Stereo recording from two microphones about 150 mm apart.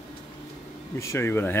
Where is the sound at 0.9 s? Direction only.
20° left (ahead or behind).